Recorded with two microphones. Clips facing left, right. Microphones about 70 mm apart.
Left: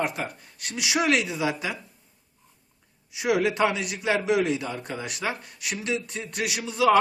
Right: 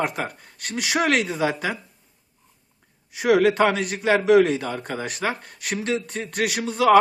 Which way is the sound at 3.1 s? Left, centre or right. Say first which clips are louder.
Right 6 dB; right.